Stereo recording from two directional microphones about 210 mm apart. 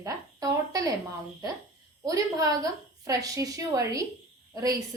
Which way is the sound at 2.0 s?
15° right (ahead or behind).